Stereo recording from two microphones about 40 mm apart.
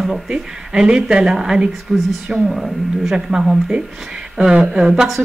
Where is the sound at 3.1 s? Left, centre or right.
Centre.